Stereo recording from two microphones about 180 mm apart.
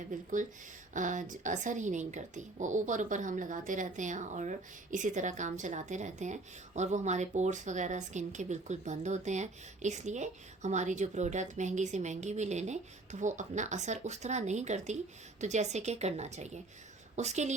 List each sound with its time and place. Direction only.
0.1 s speech: 45° right (ahead or behind)